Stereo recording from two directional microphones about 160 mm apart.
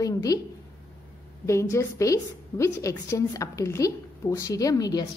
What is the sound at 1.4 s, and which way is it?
A woman's voice, 20° left (ahead or behind).